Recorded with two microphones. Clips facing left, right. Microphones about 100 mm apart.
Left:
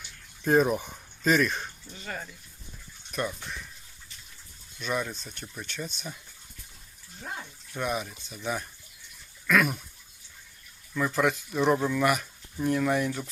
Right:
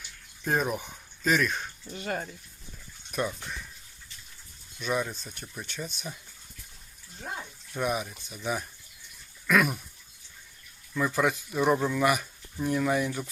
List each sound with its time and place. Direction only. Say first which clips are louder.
0.0 s a sound: left 4 dB; centre (ahead or behind)
2.0 s speech: right 5 dB; 50° right (ahead or behind)
3.1 s speech: right 1 dB; 5° right (ahead or behind)
4.8 s speech: right 1 dB; 5° right (ahead or behind)
7.7 s speech: right 1 dB; 5° right (ahead or behind)
10.9 s speech: even; 5° right (ahead or behind)